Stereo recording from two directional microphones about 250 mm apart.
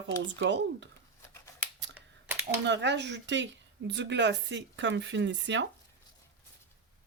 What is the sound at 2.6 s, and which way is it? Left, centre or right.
Speech, right.